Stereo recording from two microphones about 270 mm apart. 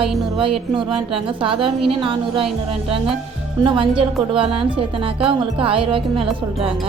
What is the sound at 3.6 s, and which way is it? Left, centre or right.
Speech, centre.